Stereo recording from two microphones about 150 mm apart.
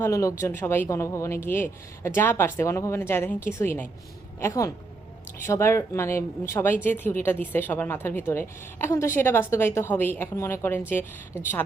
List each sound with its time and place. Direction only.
0.0 s speech: 20° left (ahead or behind)